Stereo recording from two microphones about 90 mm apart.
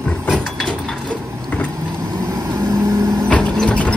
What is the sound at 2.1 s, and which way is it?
Vehicle, 45° right (ahead or behind).